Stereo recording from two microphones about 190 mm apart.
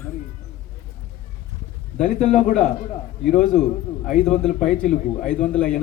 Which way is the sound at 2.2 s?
35° left (ahead or behind).